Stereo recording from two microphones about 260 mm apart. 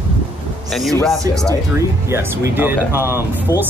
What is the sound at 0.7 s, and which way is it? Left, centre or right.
Speech, centre.